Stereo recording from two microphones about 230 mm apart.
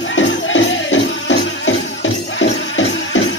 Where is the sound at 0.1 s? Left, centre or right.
Left.